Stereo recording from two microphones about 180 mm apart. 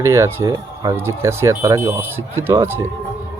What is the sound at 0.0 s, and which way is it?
Speech, 15° right (ahead or behind).